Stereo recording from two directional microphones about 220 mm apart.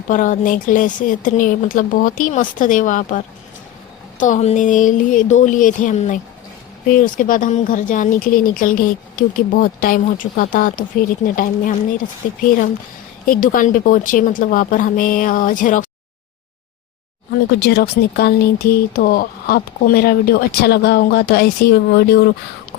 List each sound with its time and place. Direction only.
0.1 s speech: 35° left (ahead or behind)
17.6 s speech: 45° left (ahead or behind)